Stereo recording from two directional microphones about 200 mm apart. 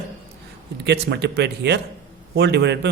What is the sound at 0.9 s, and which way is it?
Speech, 55° right (ahead or behind).